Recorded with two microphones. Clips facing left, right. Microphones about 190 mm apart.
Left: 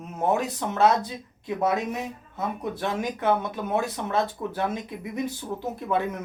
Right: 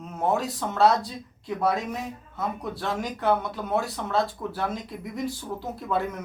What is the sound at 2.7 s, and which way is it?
Speech, 20° left (ahead or behind).